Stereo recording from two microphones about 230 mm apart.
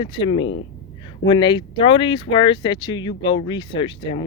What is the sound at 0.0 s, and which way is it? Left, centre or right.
Speech, left.